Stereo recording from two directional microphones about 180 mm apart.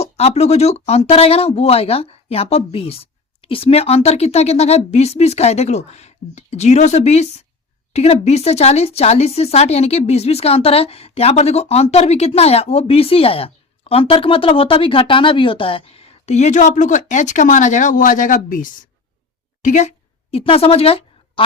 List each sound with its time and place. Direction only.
0.0 s a woman's voice: 35° left (ahead or behind)
20.3 s speech: 30° left (ahead or behind)